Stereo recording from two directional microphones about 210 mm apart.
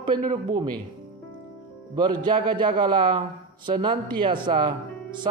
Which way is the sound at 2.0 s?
20° right (ahead or behind).